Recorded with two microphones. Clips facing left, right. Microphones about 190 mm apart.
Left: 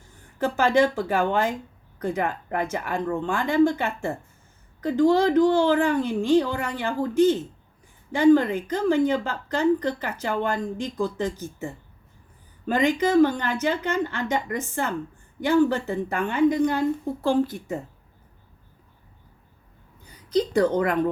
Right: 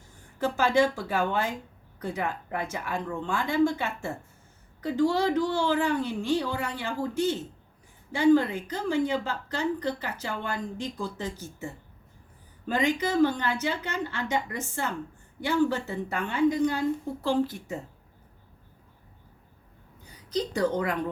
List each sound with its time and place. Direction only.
0.3 s a woman's voice: 55° left (ahead or behind)
13.0 s a woman's voice: 50° left (ahead or behind)
20.3 s a woman's voice: 60° left (ahead or behind)